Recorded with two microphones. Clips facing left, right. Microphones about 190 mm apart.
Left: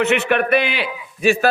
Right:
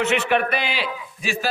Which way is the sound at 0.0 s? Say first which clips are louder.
Left 3 dB; 60° left (ahead or behind).